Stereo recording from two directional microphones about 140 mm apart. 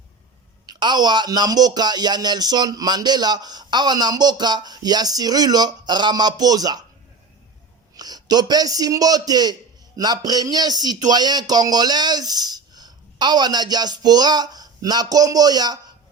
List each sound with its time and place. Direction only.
0.7 s a man's voice: 30° right (ahead or behind)
7.9 s a man's voice: 30° right (ahead or behind)